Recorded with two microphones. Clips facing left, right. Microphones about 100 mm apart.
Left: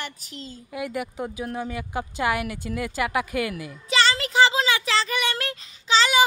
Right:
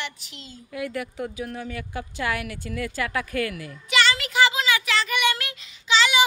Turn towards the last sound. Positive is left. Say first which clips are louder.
# left 1 dB
turn(degrees=35)  # may be behind; listen again after turning